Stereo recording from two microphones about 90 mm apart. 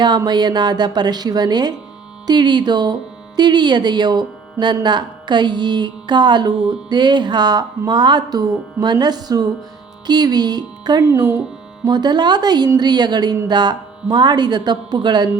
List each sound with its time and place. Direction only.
0.3 s speech: 55° right (ahead or behind)
11.0 s speech: 35° right (ahead or behind)
11.9 s speech: 50° right (ahead or behind)